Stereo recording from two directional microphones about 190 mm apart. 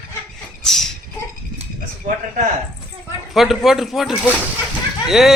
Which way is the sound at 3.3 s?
Centre (ahead or behind).